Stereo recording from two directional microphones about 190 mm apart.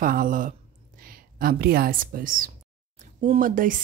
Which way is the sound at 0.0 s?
45° right (ahead or behind).